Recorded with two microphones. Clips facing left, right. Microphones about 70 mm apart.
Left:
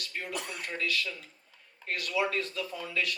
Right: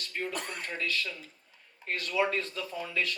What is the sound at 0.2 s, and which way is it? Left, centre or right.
Speech, right.